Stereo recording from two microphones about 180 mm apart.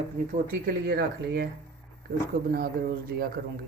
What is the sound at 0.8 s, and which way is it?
Speech, 65° right (ahead or behind).